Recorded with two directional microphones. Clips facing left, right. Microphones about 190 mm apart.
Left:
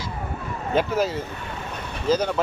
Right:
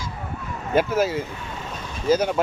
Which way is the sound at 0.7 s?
10° right (ahead or behind).